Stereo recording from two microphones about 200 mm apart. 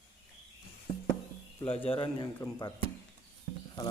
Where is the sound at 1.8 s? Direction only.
25° left (ahead or behind).